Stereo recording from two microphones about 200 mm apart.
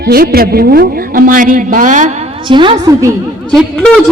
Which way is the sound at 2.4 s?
25° right (ahead or behind).